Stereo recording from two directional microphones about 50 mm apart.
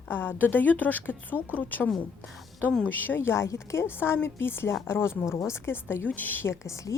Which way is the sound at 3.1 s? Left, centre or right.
Left.